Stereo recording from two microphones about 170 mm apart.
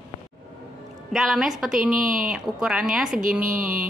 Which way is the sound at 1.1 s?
Centre (ahead or behind).